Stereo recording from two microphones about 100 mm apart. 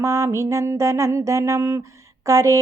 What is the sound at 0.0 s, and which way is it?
Mantra, 30° right (ahead or behind).